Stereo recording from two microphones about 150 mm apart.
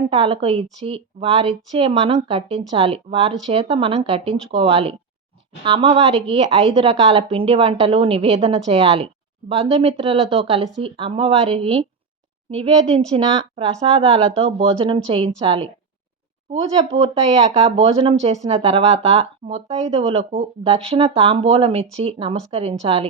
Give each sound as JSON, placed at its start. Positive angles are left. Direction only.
{"t": 0.1, "sound": "a woman's voice", "side_deg": -40}
{"t": 14.3, "sound": "a woman's voice", "side_deg": -40}